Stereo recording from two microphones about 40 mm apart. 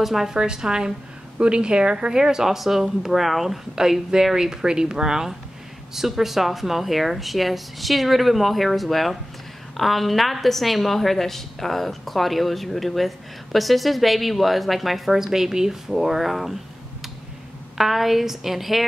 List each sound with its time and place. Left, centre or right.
0.0 s a woman's voice: centre
0.3 s a woman's voice: centre
17.7 s a woman's voice: centre